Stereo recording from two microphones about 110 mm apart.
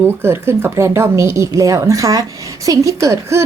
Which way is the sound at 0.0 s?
20° right (ahead or behind).